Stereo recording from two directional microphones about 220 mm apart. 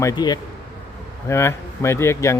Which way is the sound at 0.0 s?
20° left (ahead or behind).